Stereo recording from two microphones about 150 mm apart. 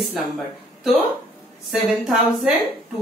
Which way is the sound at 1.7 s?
5° right (ahead or behind).